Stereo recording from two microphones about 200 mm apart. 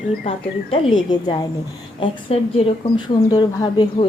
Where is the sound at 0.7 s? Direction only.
20° left (ahead or behind).